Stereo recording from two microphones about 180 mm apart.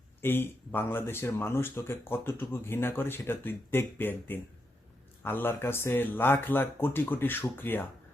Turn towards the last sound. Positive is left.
turn(degrees=10)  # may be behind; listen again after turning